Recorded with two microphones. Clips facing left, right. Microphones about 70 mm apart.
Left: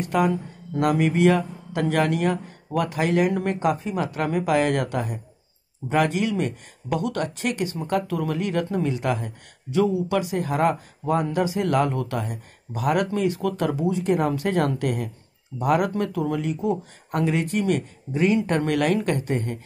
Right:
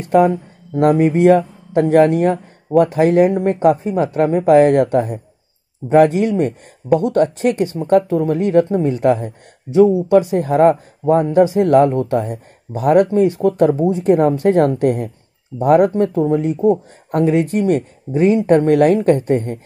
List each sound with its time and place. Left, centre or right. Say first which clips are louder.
0.0 s speech: right 9 dB; right